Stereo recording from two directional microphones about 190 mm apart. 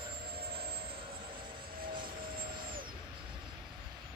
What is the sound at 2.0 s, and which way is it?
Music, 50° right (ahead or behind).